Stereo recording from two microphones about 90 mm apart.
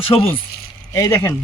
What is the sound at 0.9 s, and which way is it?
Speech, 30° left (ahead or behind).